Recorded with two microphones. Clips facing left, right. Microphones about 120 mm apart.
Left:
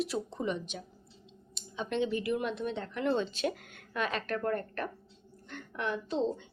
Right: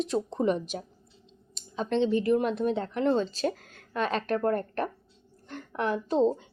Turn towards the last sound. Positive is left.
turn(degrees=-40)  # may be behind; listen again after turning